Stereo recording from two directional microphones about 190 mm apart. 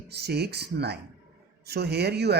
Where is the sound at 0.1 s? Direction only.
60° right (ahead or behind).